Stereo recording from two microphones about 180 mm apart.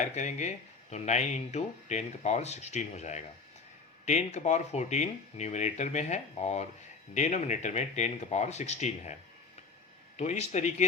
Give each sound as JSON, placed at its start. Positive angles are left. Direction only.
{"t": 0.0, "sound": "speech", "side_deg": 45}
{"t": 10.2, "sound": "speech", "side_deg": 40}